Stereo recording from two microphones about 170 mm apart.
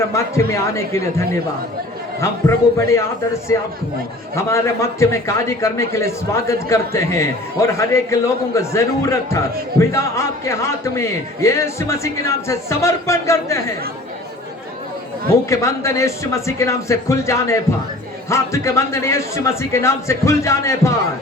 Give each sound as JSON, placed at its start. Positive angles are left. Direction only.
{"t": 0.1, "sound": "a man's voice", "side_deg": 15}
{"t": 2.7, "sound": "a man's voice", "side_deg": 15}
{"t": 15.4, "sound": "a man's voice", "side_deg": 15}